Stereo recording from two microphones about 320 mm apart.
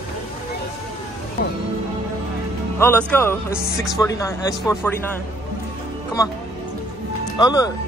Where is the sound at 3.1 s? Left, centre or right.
Centre.